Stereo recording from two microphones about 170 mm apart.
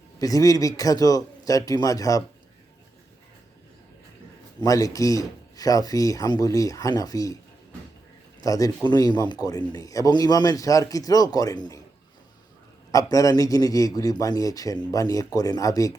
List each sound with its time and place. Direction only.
0.2 s speech: 20° left (ahead or behind)
4.6 s speech: 20° left (ahead or behind)
8.4 s speech: 20° left (ahead or behind)
12.9 s speech: 20° left (ahead or behind)